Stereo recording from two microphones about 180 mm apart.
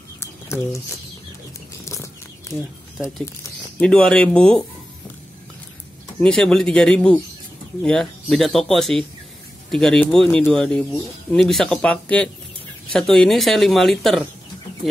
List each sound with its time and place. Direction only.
1.9 s chicken: 15° left (ahead or behind)
3.8 s speech: 5° left (ahead or behind)
6.1 s speech: 5° left (ahead or behind)